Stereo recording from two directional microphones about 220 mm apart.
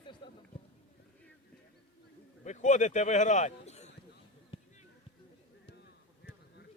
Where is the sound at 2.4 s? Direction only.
35° left (ahead or behind).